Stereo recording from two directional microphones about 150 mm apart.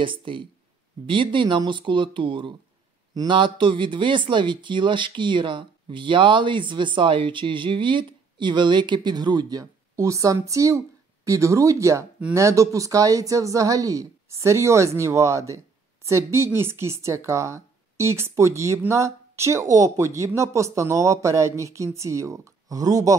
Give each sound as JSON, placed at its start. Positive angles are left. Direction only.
{"t": 0.0, "sound": "speech", "side_deg": -35}